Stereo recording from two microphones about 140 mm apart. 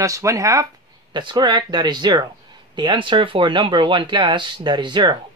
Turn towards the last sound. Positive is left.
turn(degrees=-30)  # may be behind; listen again after turning